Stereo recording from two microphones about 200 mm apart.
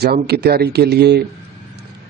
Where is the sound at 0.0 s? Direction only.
55° right (ahead or behind).